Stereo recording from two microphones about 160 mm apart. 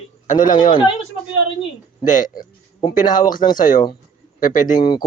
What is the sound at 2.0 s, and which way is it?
Speech, 55° left (ahead or behind).